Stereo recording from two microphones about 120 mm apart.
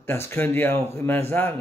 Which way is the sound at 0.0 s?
20° left (ahead or behind).